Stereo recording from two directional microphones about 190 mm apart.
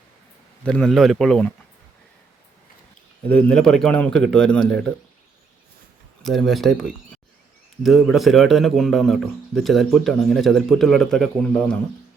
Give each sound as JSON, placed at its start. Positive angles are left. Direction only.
{"t": 0.6, "sound": "a man's voice", "side_deg": 5}
{"t": 3.2, "sound": "a man's voice", "side_deg": 5}
{"t": 6.2, "sound": "a man's voice", "side_deg": 0}